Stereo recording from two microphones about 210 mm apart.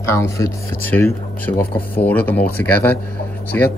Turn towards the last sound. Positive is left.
turn(degrees=10)  # may be behind; listen again after turning